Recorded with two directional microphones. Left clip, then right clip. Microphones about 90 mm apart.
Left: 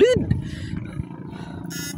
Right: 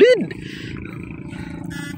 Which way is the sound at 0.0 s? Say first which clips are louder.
Right 4 dB; 25° right (ahead or behind).